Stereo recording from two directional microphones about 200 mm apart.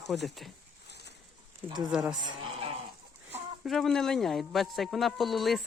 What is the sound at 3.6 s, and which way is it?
A man's voice, centre (ahead or behind).